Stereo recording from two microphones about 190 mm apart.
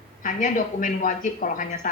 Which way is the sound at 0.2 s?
45° left (ahead or behind).